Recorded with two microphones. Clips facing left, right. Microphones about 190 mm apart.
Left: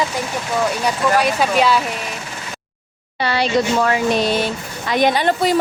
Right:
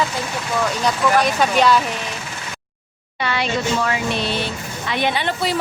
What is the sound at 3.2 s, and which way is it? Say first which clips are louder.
Speech: left 4 dB; 35° left (ahead or behind).